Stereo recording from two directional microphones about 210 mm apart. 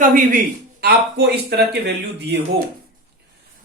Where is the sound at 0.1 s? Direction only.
40° right (ahead or behind).